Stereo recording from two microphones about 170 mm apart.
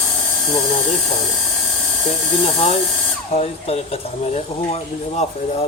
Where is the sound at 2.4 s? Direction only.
40° left (ahead or behind).